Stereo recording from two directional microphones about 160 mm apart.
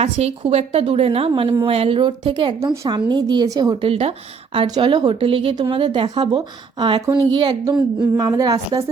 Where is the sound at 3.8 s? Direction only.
40° right (ahead or behind).